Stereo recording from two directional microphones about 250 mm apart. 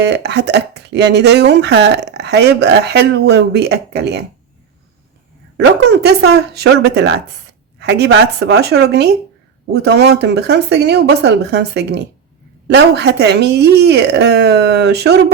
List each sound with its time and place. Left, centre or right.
0.0 s speech: right
5.9 s speech: right